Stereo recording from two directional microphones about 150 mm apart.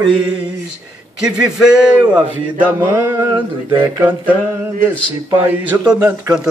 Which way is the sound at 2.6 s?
15° right (ahead or behind).